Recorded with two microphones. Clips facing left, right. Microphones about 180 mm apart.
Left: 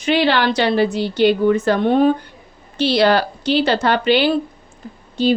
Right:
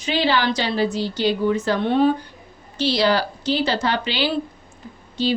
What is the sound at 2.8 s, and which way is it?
A woman's voice, 60° left (ahead or behind).